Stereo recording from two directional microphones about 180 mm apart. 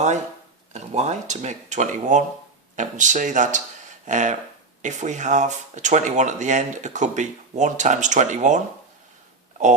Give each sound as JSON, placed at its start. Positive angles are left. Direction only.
{"t": 0.7, "sound": "speech", "side_deg": -40}